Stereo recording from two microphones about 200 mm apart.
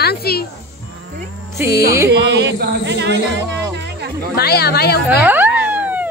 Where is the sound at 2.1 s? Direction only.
60° right (ahead or behind).